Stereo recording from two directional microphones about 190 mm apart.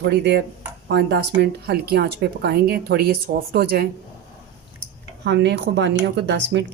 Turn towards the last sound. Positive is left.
turn(degrees=-65)  # may be behind; listen again after turning